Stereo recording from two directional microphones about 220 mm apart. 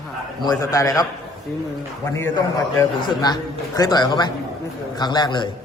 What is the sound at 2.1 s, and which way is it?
A man's voice, 10° left (ahead or behind).